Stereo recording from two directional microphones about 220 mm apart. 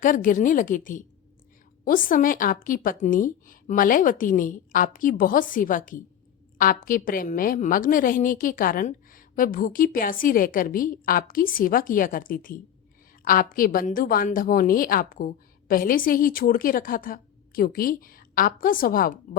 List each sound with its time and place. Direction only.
0.0 s a woman's voice: 35° left (ahead or behind)